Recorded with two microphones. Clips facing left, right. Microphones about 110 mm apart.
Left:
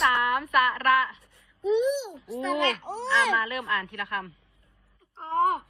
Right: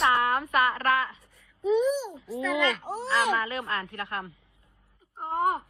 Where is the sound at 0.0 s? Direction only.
30° right (ahead or behind).